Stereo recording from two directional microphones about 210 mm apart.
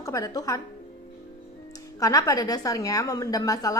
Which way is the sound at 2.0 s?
15° left (ahead or behind).